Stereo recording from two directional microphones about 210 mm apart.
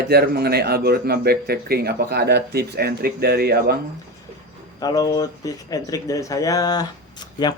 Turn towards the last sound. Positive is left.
turn(degrees=20)  # may be behind; listen again after turning